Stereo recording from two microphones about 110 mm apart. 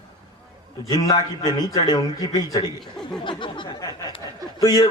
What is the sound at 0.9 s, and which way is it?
A man's voice, 35° left (ahead or behind).